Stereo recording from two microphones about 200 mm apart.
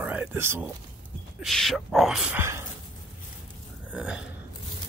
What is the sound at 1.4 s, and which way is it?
Speech, centre (ahead or behind).